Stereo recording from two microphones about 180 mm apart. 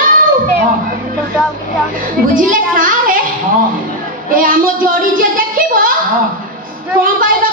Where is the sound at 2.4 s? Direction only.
50° right (ahead or behind).